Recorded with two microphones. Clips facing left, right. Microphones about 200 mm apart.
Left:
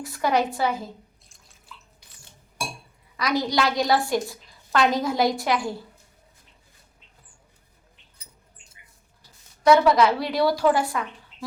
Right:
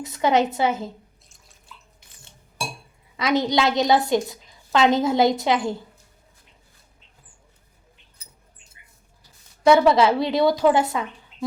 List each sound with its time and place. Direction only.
0.0 s a woman's voice: 20° right (ahead or behind)
3.2 s a woman's voice: 25° right (ahead or behind)
9.6 s a woman's voice: 25° right (ahead or behind)